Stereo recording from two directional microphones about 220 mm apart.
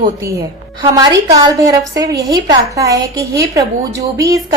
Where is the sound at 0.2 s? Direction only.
15° right (ahead or behind).